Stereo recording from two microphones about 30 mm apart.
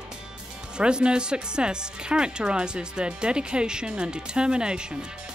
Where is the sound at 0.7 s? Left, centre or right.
Right.